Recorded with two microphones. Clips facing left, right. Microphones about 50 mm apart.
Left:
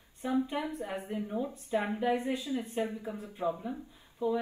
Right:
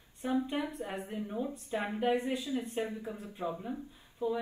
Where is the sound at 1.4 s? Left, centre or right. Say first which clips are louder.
Left 3 dB; left.